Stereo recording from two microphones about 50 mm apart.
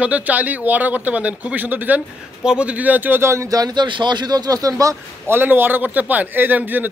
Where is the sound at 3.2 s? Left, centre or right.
Right.